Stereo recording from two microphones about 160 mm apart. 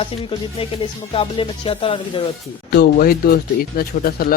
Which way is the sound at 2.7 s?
70° left (ahead or behind).